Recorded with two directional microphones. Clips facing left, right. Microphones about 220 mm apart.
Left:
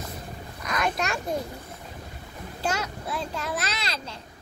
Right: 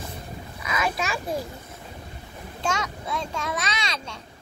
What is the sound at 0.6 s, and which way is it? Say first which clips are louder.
Speech: even; 5° right (ahead or behind).